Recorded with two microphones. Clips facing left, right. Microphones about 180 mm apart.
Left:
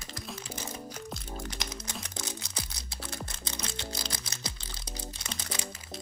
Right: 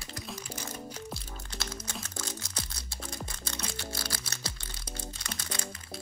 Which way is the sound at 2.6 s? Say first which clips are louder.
Even; 70° left (ahead or behind).